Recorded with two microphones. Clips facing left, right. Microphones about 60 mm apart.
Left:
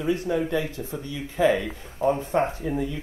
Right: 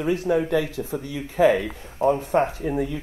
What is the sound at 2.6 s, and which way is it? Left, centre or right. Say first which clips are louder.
Speech: right 2 dB; right.